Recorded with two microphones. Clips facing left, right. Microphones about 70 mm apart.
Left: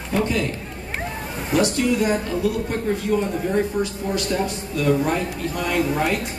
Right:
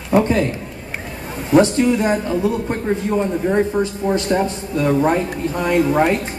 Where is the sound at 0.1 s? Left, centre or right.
Right.